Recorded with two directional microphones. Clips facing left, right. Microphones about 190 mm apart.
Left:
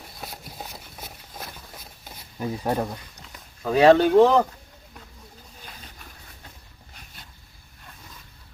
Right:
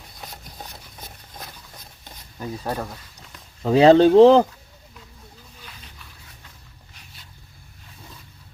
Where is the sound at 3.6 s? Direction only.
25° right (ahead or behind).